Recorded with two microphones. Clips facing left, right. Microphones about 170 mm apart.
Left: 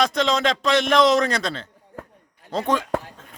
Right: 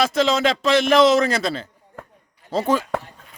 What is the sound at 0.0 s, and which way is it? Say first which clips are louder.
A man's voice: right 2 dB; 5° right (ahead or behind).